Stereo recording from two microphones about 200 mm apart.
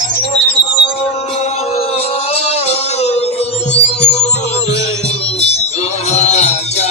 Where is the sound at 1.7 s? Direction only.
30° left (ahead or behind).